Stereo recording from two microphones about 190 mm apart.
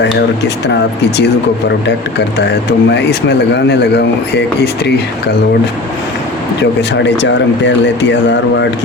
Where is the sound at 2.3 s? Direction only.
65° left (ahead or behind).